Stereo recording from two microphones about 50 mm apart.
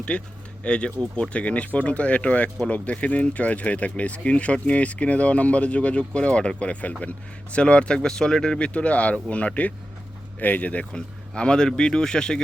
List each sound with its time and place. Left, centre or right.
0.1 s speech: left
10.9 s speech: centre